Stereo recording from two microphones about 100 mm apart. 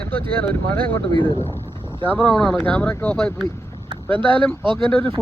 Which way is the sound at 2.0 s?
15° left (ahead or behind).